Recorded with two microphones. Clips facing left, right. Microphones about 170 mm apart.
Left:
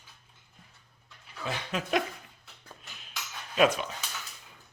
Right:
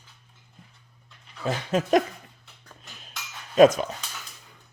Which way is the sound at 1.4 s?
45° right (ahead or behind).